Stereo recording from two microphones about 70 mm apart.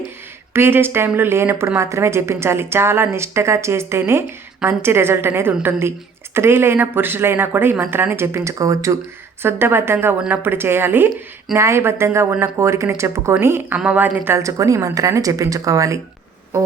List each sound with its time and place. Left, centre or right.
0.5 s speech: right
9.4 s speech: right
13.7 s a woman's voice: right
14.3 s speech: right